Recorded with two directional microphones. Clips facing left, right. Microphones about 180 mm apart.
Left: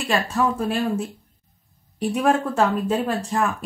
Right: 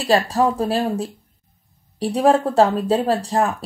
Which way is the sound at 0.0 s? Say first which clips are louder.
Right 5 dB; 35° right (ahead or behind).